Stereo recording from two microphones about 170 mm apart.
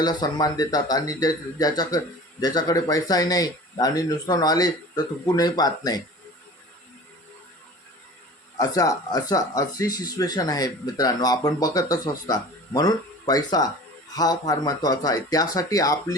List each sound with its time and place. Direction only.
0.0 s speech: 25° left (ahead or behind)
8.5 s speech: 20° left (ahead or behind)